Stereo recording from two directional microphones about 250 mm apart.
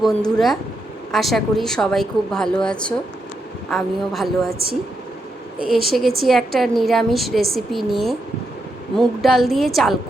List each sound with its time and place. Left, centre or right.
0.0 s speech: centre
4.4 s speech: right
5.7 s speech: centre